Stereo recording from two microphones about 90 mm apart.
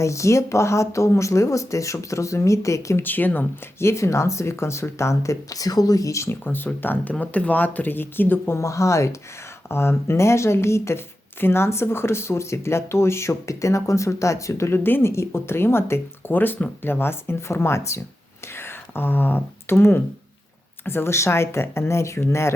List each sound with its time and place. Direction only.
0.0 s speech: 35° left (ahead or behind)
3.0 s speech: 20° left (ahead or behind)
8.5 s speech: 35° left (ahead or behind)